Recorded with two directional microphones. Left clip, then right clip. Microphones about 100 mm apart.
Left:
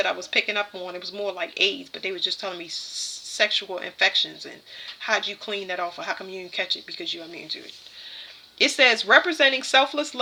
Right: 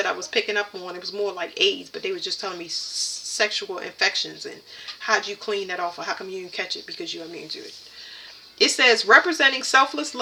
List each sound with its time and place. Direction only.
0.0 s speech: 35° left (ahead or behind)